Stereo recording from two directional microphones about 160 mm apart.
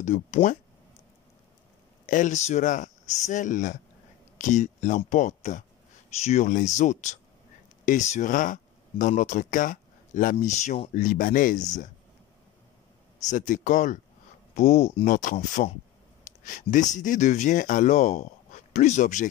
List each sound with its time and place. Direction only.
0.0 s speech: 45° left (ahead or behind)
2.0 s speech: 55° left (ahead or behind)
13.3 s speech: 50° left (ahead or behind)
16.3 s a sound: 55° left (ahead or behind)
16.9 s speech: 50° left (ahead or behind)